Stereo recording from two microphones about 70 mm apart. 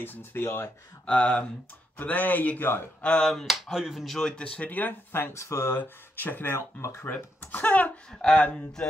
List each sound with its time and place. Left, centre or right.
0.0 s speech: left
1.0 s speech: centre
3.0 s speech: centre
4.2 s speech: centre; by 5.7 s left
5.7 s speech: left
6.8 s speech: left
7.1 s speech: left
8.1 s speech: centre